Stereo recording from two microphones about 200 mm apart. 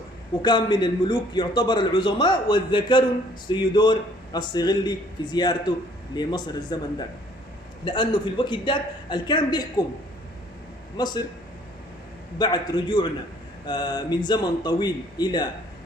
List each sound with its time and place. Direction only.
0.4 s a man's voice: 20° left (ahead or behind)
7.9 s a man's voice: 25° left (ahead or behind)
10.9 s a man's voice: 20° left (ahead or behind)
12.4 s a man's voice: 20° left (ahead or behind)